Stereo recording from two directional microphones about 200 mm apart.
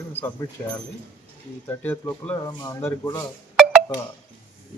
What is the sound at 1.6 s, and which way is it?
Speech, 10° left (ahead or behind).